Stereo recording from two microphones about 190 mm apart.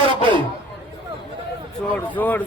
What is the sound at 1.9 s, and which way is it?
Speech, 10° left (ahead or behind).